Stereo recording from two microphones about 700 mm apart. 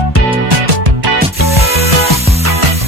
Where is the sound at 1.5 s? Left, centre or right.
Centre.